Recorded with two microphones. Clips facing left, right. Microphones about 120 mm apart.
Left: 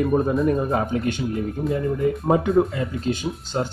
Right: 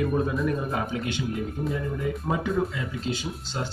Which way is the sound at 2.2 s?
55° left (ahead or behind).